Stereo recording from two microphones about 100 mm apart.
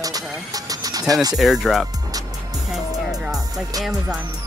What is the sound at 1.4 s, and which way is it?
Speech, 5° right (ahead or behind).